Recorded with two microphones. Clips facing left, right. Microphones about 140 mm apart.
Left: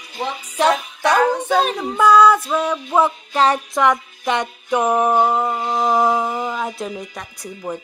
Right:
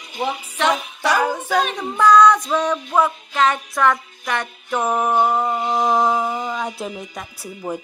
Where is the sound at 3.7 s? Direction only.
20° left (ahead or behind); by 7.8 s 10° right (ahead or behind).